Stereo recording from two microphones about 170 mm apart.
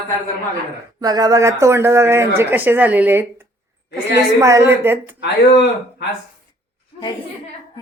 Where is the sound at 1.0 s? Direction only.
20° right (ahead or behind).